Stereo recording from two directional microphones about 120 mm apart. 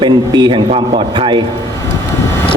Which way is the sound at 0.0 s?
40° right (ahead or behind).